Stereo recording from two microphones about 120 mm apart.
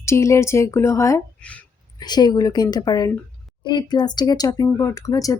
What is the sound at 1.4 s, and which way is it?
Speech, 10° left (ahead or behind).